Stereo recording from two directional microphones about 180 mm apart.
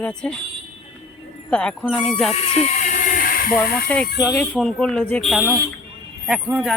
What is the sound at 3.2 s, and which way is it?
Hiss, 50° left (ahead or behind).